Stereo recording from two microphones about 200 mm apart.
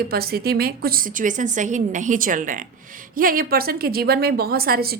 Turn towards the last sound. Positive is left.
turn(degrees=-50)  # may be behind; listen again after turning